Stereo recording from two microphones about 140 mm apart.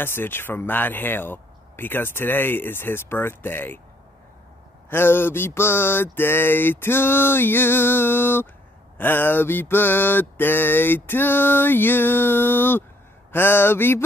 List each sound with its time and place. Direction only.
0.0 s mantra: 15° left (ahead or behind)
4.8 s mantra: 15° left (ahead or behind)